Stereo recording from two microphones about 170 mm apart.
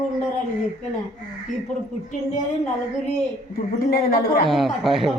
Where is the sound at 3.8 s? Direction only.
65° left (ahead or behind).